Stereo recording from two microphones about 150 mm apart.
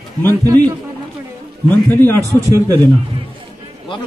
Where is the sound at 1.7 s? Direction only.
15° left (ahead or behind).